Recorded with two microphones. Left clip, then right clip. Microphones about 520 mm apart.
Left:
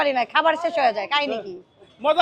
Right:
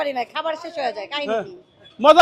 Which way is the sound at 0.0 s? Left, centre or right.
Centre.